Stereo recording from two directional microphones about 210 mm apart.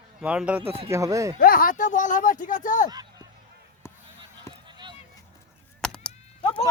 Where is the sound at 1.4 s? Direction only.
40° left (ahead or behind).